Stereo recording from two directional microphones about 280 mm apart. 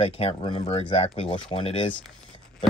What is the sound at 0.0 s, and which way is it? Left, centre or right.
Speech, centre.